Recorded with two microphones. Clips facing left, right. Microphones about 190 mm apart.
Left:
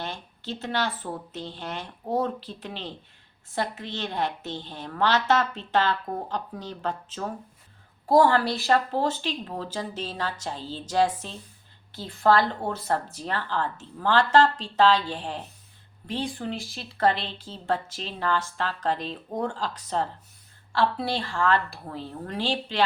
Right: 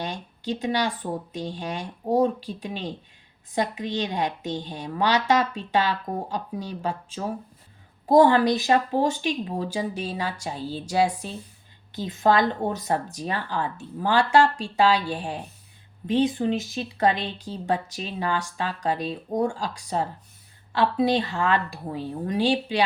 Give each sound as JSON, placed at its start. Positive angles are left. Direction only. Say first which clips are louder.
{"t": 0.0, "sound": "speech", "louder": "right 4 dB", "side_deg": -15}